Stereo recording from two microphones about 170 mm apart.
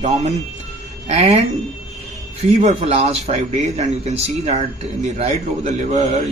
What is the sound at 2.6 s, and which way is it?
Speech, 40° right (ahead or behind).